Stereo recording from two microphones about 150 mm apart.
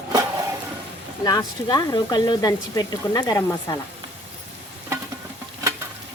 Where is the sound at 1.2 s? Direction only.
25° left (ahead or behind).